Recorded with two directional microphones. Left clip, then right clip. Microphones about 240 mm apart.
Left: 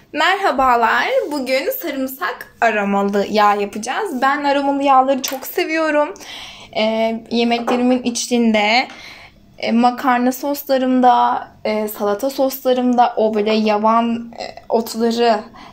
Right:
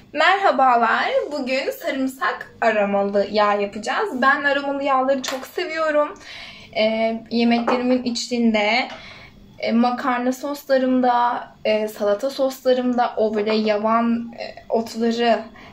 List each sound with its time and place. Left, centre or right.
0.1 s a woman's voice: centre